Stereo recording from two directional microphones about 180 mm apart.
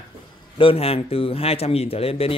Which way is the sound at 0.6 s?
30° left (ahead or behind).